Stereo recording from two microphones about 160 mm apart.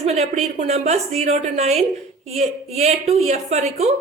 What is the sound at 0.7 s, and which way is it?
A woman's voice, 45° right (ahead or behind).